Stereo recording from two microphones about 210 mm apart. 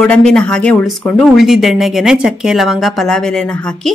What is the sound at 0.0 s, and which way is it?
Speech, 5° left (ahead or behind).